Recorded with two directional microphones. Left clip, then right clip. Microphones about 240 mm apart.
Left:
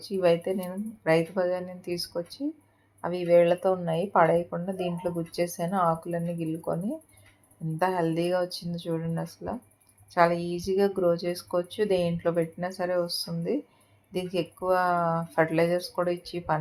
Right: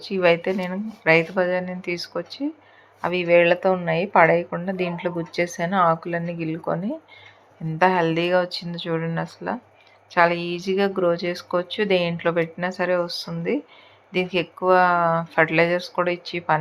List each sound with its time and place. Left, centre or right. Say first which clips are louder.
0.0 s speech: right 5 dB; centre
7.8 s speech: right 7 dB; centre
13.0 s speech: right 3 dB; right
14.1 s speech: right 7 dB; centre